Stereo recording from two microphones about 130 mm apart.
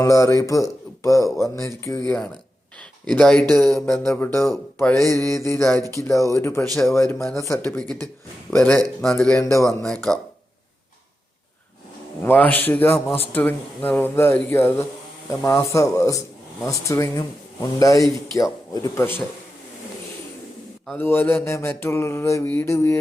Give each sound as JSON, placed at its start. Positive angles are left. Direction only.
{"t": 0.0, "sound": "a man's voice", "side_deg": 25}
{"t": 3.1, "sound": "speech", "side_deg": 5}
{"t": 5.8, "sound": "speech", "side_deg": -25}
{"t": 6.1, "sound": "a man's voice", "side_deg": 25}
{"t": 9.4, "sound": "a man's voice", "side_deg": 25}
{"t": 9.6, "sound": "speech", "side_deg": 5}
{"t": 12.2, "sound": "a man's voice", "side_deg": 15}
{"t": 21.0, "sound": "a man's voice", "side_deg": 15}